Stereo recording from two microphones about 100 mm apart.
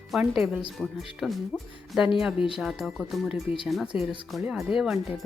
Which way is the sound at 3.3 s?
65° left (ahead or behind).